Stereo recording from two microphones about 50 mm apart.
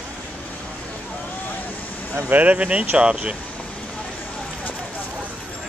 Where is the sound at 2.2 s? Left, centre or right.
Right.